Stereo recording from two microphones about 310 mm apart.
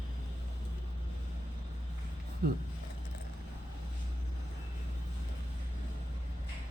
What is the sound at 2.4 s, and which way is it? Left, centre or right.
Speech, right.